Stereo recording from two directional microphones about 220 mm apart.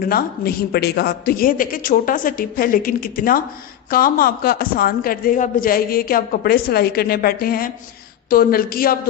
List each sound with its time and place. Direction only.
0.0 s a woman's voice: 45° left (ahead or behind)